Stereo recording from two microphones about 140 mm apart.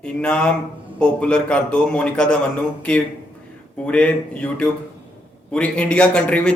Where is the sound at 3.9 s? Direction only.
10° left (ahead or behind).